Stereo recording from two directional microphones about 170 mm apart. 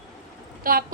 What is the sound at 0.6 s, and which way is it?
Speech, 60° right (ahead or behind).